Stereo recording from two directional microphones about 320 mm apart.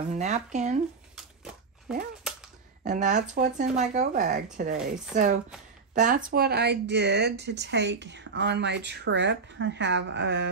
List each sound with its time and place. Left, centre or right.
0.1 s speech: right
1.1 s a sound: centre
2.8 s speech: right